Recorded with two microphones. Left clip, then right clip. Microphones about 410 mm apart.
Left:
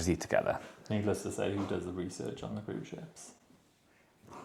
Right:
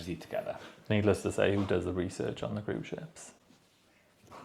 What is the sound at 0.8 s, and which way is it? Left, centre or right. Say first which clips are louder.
Speech: right 6 dB; right.